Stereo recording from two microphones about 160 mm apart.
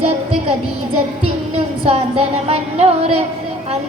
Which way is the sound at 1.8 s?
40° right (ahead or behind).